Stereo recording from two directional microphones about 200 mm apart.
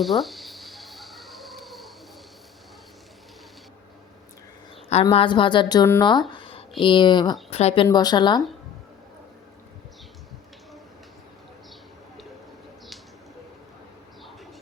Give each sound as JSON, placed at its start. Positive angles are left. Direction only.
{"t": 0.0, "sound": "a sound", "side_deg": 0}
{"t": 5.0, "sound": "a woman's voice", "side_deg": 25}
{"t": 7.9, "sound": "a woman's voice", "side_deg": 20}